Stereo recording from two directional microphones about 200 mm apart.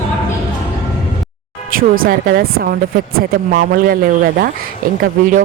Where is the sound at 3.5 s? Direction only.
45° right (ahead or behind).